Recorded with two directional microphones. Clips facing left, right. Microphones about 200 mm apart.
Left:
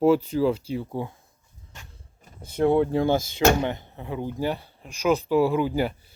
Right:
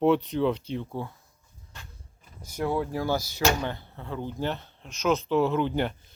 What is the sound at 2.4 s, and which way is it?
Speech, 25° left (ahead or behind).